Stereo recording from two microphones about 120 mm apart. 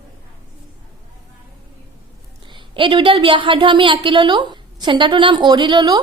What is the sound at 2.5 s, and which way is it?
A child's voice, 45° right (ahead or behind).